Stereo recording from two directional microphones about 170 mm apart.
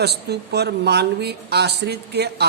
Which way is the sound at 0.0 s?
75° right (ahead or behind).